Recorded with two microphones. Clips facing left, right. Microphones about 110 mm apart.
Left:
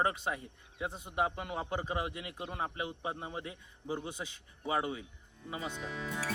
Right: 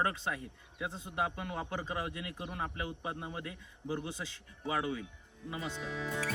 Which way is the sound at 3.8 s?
15° left (ahead or behind).